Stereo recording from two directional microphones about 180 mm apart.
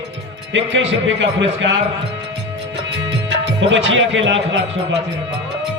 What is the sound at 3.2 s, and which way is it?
Speech, 90° right.